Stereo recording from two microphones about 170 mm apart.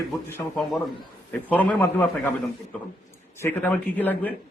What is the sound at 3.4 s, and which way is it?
Speech, 10° left (ahead or behind).